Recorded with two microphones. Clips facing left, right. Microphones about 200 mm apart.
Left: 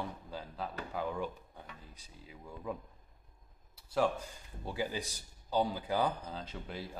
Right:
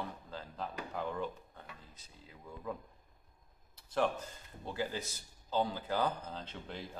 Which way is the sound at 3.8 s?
10° left (ahead or behind).